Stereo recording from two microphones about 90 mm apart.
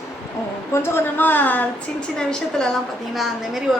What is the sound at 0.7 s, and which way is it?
Speech, 30° left (ahead or behind).